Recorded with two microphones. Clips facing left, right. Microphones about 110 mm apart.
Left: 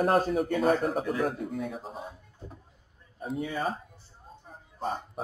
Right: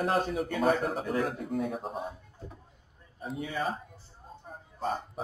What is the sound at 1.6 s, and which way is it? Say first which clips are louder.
Speech: right 2 dB; 45° right (ahead or behind).